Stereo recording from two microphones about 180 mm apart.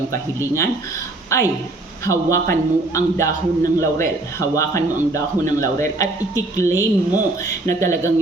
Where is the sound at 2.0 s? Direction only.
15° left (ahead or behind).